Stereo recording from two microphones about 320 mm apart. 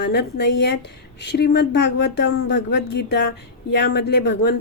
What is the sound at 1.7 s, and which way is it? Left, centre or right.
Speech, left.